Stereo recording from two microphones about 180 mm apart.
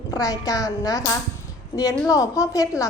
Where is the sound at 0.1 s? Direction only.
20° left (ahead or behind).